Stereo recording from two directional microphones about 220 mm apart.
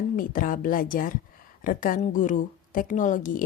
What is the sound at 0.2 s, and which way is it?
A woman's voice, 40° left (ahead or behind).